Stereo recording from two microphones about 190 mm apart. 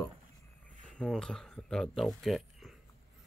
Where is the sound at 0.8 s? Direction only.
5° left (ahead or behind).